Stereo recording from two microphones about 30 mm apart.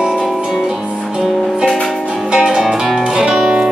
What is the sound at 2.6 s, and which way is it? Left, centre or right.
Music, centre.